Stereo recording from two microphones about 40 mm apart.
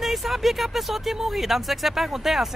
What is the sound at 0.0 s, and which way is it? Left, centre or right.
Speech, centre.